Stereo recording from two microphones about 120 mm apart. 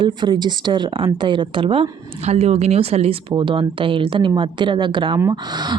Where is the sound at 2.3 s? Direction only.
65° right (ahead or behind).